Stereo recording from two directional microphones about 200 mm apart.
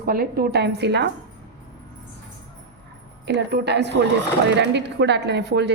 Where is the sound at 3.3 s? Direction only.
55° right (ahead or behind).